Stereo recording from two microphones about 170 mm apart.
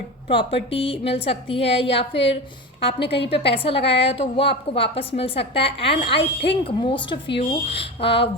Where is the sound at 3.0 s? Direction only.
90° left.